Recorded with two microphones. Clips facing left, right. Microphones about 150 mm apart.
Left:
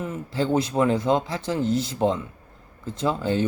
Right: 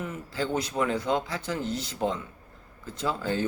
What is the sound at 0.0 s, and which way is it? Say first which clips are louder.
Speech: left 5 dB; 30° left (ahead or behind).